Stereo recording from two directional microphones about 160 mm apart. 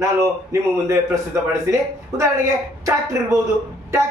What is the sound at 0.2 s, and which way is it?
A man's voice, 20° right (ahead or behind).